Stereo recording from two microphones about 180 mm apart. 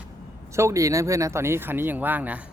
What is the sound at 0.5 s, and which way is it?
Speech, 15° right (ahead or behind).